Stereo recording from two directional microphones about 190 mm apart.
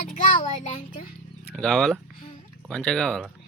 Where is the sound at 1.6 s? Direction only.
Centre (ahead or behind).